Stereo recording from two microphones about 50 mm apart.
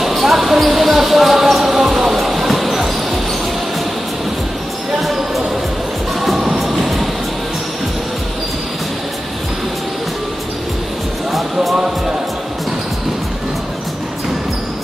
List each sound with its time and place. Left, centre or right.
0.0 s basketball bounce: centre
5.0 s basketball bounce: centre
6.2 s music: centre